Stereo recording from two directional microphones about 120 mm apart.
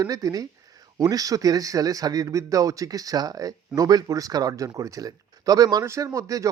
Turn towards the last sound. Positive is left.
turn(degrees=-25)  # may be behind; listen again after turning